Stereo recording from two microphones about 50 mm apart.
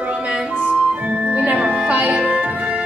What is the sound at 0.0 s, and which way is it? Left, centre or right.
Music, right.